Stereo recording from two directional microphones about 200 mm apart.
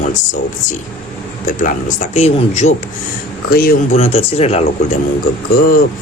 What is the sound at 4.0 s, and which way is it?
Speech, 30° left (ahead or behind).